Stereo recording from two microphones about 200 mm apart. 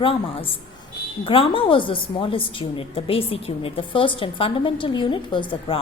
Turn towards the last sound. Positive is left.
turn(degrees=25)  # may be behind; listen again after turning